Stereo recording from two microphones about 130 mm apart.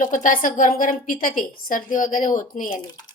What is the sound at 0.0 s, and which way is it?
A woman's voice, 90° left.